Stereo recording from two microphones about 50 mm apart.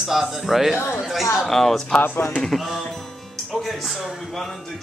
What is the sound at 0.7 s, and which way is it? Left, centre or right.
Speech, left.